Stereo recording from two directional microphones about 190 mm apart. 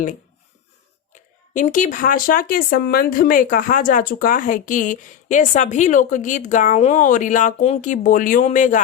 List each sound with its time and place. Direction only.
1.1 s speech: 40° left (ahead or behind)